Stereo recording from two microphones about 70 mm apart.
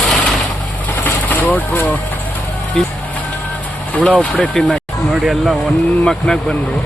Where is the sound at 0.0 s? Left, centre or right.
Centre.